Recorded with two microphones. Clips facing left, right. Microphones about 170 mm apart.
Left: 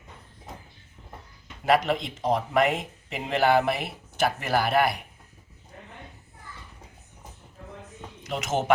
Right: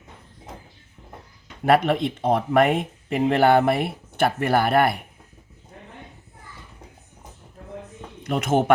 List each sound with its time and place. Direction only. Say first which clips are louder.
1.6 s speech: right 4 dB; 55° right (ahead or behind)
8.2 s speech: right 7 dB; 55° right (ahead or behind)